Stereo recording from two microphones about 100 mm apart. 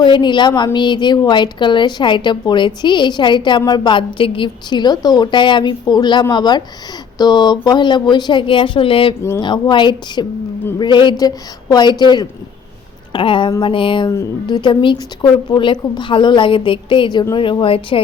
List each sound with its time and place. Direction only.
0.0 s a woman's voice: 50° left (ahead or behind)
9.4 s a woman's voice: 50° left (ahead or behind)
13.1 s a woman's voice: 55° left (ahead or behind)